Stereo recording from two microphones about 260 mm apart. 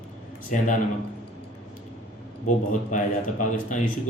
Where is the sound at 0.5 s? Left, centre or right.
Left.